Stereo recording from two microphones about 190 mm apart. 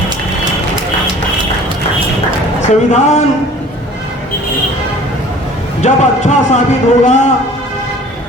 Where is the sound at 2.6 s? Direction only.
40° left (ahead or behind).